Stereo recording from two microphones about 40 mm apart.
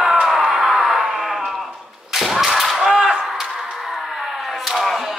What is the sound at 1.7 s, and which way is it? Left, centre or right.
Whip, centre.